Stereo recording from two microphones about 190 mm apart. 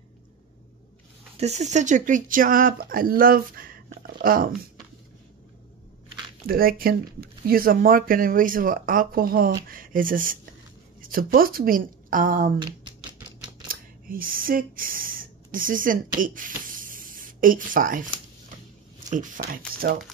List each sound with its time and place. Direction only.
1.3 s speech: 35° right (ahead or behind)
6.4 s speech: 50° right (ahead or behind)
13.7 s speech: 50° right (ahead or behind)
19.0 s speech: 40° right (ahead or behind)